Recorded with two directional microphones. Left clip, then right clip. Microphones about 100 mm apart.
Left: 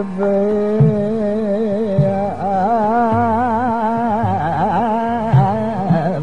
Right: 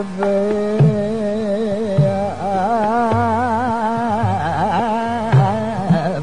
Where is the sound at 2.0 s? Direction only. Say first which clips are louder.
Left 1 dB; 30° right (ahead or behind).